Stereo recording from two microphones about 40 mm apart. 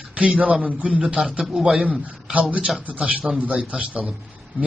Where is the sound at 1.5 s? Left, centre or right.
Centre.